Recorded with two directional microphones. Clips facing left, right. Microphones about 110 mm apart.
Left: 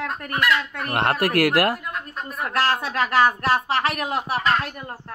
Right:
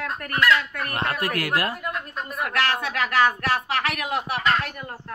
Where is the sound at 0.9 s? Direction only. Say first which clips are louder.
Left 6 dB; 70° left (ahead or behind).